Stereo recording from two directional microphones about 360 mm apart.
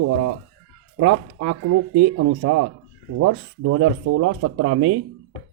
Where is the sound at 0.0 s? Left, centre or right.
Right.